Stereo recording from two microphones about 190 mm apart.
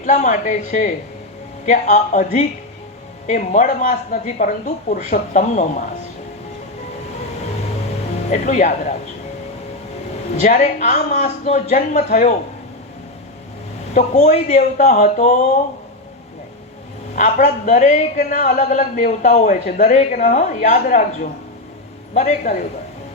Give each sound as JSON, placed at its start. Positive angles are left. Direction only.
{"t": 0.0, "sound": "a man's voice", "side_deg": 40}
{"t": 8.3, "sound": "a man's voice", "side_deg": 40}
{"t": 10.4, "sound": "a man's voice", "side_deg": 40}
{"t": 13.9, "sound": "a man's voice", "side_deg": 40}
{"t": 17.2, "sound": "a man's voice", "side_deg": 40}